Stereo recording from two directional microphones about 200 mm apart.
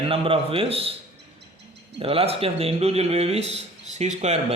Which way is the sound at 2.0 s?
30° right (ahead or behind).